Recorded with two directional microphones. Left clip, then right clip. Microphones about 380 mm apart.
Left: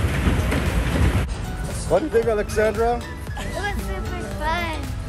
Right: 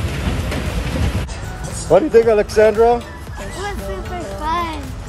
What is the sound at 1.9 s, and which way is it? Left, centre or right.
Speech, right.